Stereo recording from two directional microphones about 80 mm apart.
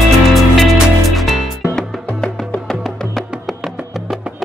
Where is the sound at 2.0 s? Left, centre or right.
Centre.